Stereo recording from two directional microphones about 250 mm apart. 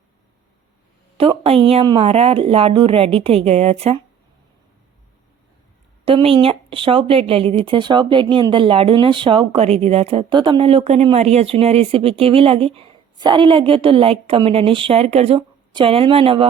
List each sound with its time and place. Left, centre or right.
1.2 s speech: right
6.1 s speech: right